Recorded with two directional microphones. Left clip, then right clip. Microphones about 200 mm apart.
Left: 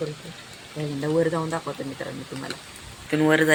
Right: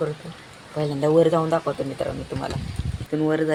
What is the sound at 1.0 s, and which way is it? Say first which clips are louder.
Speech: right 6 dB; centre (ahead or behind).